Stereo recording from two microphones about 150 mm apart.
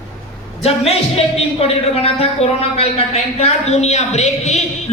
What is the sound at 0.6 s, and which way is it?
A woman's voice, 45° left (ahead or behind).